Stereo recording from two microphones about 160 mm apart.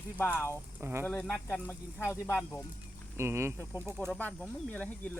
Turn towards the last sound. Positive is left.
turn(degrees=10)  # may be behind; listen again after turning